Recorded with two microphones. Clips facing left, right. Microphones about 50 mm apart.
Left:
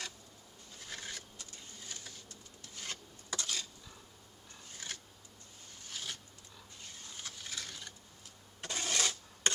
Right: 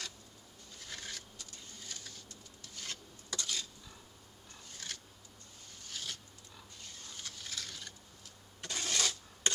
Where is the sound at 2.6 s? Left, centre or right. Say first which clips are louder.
Left 1 dB; left.